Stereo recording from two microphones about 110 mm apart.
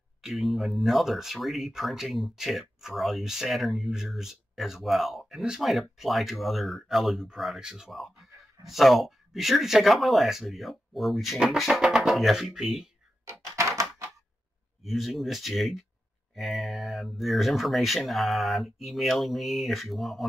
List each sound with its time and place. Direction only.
0.2 s speech: centre (ahead or behind)
13.2 s typewriter: 25° right (ahead or behind)
14.8 s speech: centre (ahead or behind)